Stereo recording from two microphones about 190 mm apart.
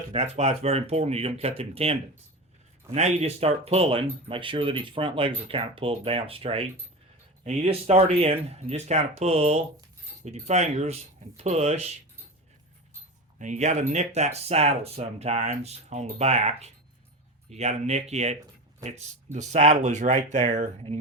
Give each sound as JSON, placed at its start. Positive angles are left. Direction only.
{"t": 0.1, "sound": "speech", "side_deg": -35}
{"t": 13.4, "sound": "speech", "side_deg": -35}